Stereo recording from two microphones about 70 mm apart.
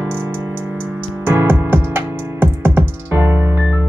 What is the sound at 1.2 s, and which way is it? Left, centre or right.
Music, right.